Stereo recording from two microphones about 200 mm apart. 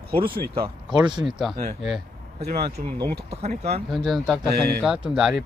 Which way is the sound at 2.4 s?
50° right (ahead or behind).